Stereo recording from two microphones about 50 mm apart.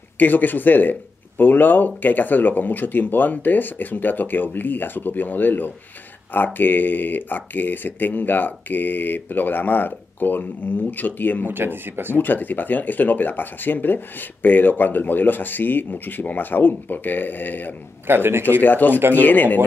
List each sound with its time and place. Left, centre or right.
0.2 s speech: left
11.4 s speech: right
12.2 s speech: left
18.0 s speech: right
18.6 s speech: left